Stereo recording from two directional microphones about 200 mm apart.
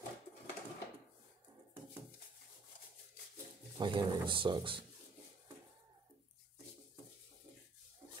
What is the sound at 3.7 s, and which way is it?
Speech, 20° right (ahead or behind).